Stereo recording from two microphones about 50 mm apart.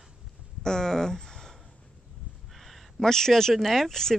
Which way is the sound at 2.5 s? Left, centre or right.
Centre.